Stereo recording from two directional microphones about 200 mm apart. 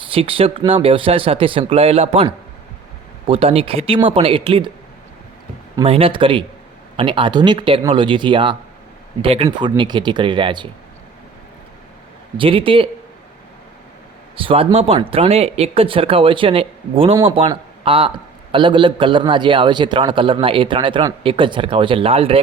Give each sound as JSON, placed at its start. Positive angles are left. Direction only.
{"t": 0.1, "sound": "a man's voice", "side_deg": -25}
{"t": 5.7, "sound": "a man's voice", "side_deg": -30}
{"t": 12.4, "sound": "a man's voice", "side_deg": -25}
{"t": 14.3, "sound": "a man's voice", "side_deg": -30}